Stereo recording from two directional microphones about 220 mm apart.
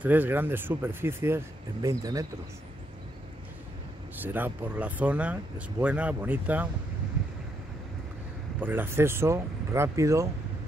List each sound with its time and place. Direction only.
0.0 s speech: 10° right (ahead or behind)
4.2 s speech: 10° right (ahead or behind)
8.5 s speech: 10° right (ahead or behind)